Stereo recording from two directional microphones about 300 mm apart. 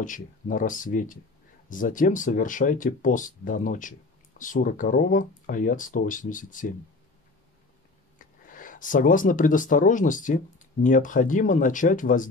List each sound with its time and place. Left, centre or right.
0.0 s speech: left
8.5 s speech: left